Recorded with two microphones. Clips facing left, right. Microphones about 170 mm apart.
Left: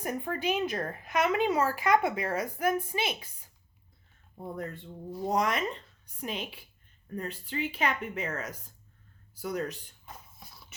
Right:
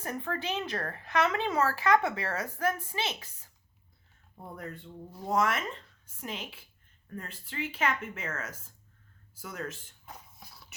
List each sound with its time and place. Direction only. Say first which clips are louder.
0.0 s speech: left 3 dB; 15° left (ahead or behind)
5.3 s speech: even; 20° left (ahead or behind)
10.1 s a sound: even; centre (ahead or behind)